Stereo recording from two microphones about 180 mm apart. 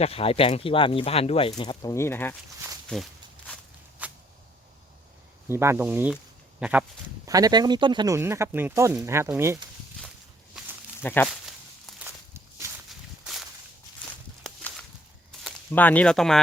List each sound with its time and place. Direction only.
0.0 s speech: 35° left (ahead or behind); by 2.3 s 15° left (ahead or behind)
2.9 s walk: 5° left (ahead or behind)
4.0 s a sound: 10° right (ahead or behind)
5.5 s speech: 15° right (ahead or behind)
7.3 s speech: 20° right (ahead or behind)
11.0 s speech: 10° left (ahead or behind)
11.9 s walk: 15° right (ahead or behind)
12.9 s walk: centre (ahead or behind)
15.4 s speech: 10° left (ahead or behind)